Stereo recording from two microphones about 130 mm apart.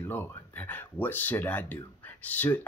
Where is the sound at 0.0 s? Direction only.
15° left (ahead or behind).